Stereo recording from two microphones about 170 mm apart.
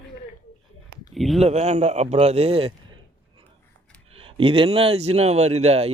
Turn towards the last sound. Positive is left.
turn(degrees=-40)  # may be behind; listen again after turning